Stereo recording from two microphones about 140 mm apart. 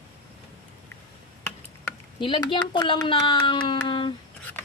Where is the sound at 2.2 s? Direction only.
35° left (ahead or behind).